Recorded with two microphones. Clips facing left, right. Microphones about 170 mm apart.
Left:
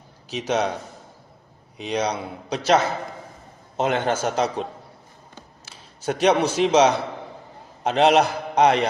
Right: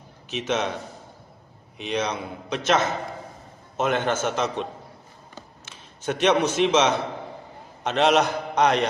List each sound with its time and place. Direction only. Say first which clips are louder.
0.4 s a man's voice: left 3 dB; 35° left (ahead or behind)
1.8 s a man's voice: left 2 dB; 35° left (ahead or behind)
5.6 s a man's voice: left 2 dB; 35° left (ahead or behind)